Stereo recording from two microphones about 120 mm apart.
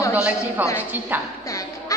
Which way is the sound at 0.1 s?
15° right (ahead or behind).